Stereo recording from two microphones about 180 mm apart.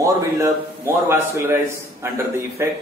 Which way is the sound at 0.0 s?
15° right (ahead or behind).